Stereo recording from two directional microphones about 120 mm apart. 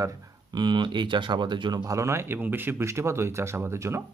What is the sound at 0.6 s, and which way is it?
Speech, 40° right (ahead or behind).